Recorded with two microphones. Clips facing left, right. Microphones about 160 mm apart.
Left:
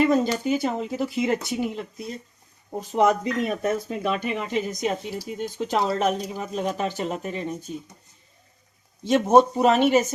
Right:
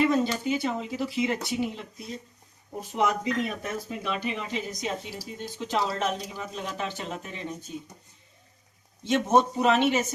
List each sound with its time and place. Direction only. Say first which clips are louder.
0.0 s speech: left 3 dB; 45° left (ahead or behind)
3.0 s speech: left 5 dB; 45° left (ahead or behind)
9.0 s speech: left 5 dB; 40° left (ahead or behind)